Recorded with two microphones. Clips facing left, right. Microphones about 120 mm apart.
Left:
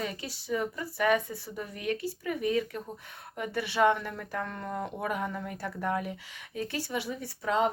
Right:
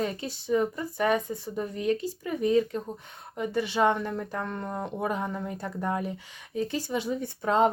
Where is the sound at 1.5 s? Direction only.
35° right (ahead or behind).